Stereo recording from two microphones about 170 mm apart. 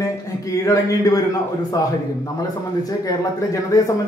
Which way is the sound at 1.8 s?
20° left (ahead or behind).